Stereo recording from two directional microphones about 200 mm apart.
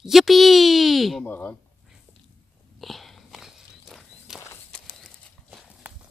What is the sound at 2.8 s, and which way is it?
Walk, centre (ahead or behind).